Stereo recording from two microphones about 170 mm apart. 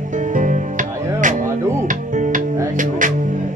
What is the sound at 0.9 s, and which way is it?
Music, 15° right (ahead or behind).